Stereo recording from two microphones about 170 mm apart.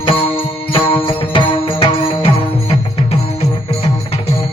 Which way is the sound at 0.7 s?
30° left (ahead or behind).